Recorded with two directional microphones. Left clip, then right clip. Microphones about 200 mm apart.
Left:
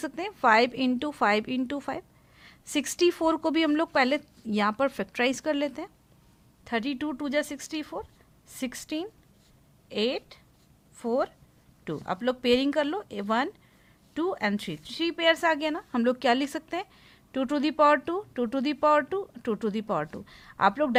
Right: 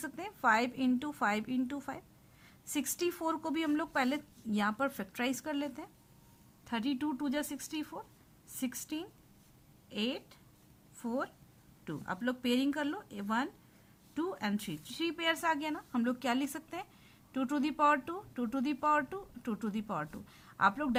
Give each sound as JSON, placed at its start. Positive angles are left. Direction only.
{"t": 0.0, "sound": "a woman's voice", "side_deg": 30}